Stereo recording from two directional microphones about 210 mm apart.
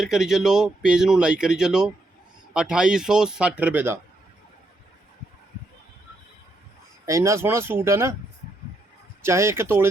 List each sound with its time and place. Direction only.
0.0 s speech: centre (ahead or behind)
7.0 s speech: 15° right (ahead or behind)
9.2 s speech: 10° right (ahead or behind)